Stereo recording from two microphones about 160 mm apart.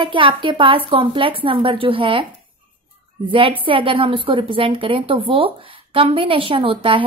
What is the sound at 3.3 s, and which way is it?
A woman's voice, 35° right (ahead or behind).